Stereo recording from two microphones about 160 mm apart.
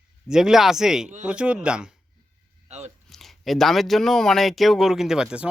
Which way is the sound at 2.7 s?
45° right (ahead or behind).